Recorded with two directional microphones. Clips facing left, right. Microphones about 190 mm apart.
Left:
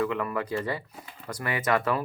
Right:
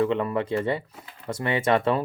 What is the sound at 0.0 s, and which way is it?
Speech, 25° right (ahead or behind).